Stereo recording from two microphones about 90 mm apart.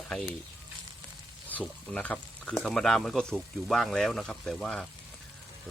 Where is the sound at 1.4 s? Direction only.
15° left (ahead or behind).